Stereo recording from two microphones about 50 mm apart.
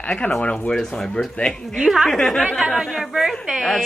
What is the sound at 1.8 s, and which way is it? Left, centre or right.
A woman's voice, centre.